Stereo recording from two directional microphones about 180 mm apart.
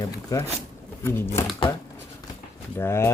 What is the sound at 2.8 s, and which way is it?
Speech, 15° left (ahead or behind).